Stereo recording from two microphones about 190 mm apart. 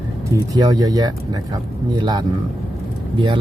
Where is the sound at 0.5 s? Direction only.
20° right (ahead or behind).